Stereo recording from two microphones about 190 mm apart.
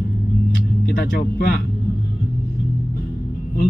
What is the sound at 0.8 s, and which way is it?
Speech, 60° left (ahead or behind).